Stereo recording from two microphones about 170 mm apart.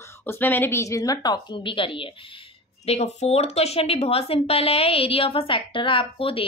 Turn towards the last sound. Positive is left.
turn(degrees=30)  # may be behind; listen again after turning